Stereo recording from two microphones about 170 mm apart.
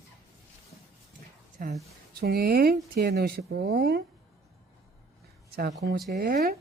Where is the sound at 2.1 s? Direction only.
65° right (ahead or behind).